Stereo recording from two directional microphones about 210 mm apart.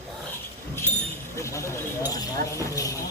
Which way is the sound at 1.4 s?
15° left (ahead or behind).